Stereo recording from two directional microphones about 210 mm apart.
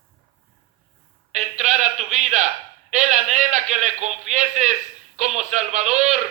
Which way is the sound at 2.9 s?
35° right (ahead or behind).